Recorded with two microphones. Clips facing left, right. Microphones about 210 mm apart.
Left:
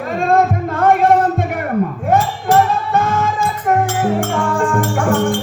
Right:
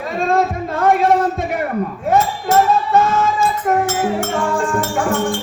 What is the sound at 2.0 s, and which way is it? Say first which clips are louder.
Music: right 1 dB; 55° left (ahead or behind).